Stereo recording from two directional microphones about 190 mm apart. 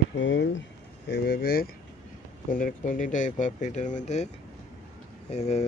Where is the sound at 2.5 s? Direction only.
45° left (ahead or behind).